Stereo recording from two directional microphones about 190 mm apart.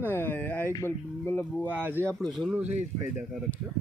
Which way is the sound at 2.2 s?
Centre (ahead or behind).